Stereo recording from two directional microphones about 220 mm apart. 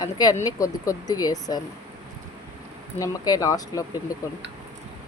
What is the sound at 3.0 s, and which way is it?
Speech, 15° left (ahead or behind).